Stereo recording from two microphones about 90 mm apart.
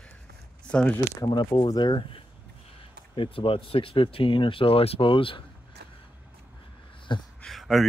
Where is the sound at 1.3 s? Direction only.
60° left (ahead or behind).